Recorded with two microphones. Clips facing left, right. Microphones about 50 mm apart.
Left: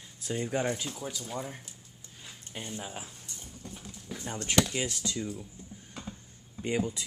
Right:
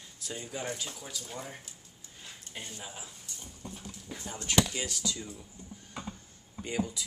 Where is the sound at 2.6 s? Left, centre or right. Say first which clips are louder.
Left 6 dB; left.